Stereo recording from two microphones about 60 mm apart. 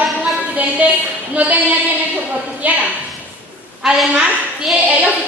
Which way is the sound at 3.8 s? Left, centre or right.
Centre.